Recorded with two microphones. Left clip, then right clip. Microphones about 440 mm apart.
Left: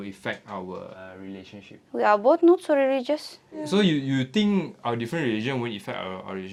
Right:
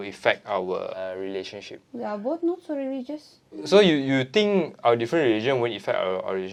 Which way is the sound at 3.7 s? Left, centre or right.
Right.